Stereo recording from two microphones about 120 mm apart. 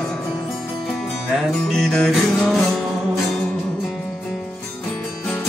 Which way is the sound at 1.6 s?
5° left (ahead or behind).